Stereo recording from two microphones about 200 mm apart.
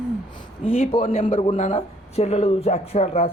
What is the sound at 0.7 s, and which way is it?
Speech, 30° left (ahead or behind).